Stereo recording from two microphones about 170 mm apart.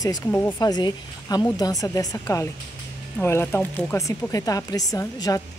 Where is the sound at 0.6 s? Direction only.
25° left (ahead or behind).